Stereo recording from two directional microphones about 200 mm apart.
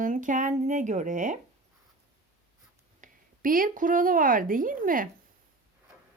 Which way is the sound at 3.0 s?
45° right (ahead or behind).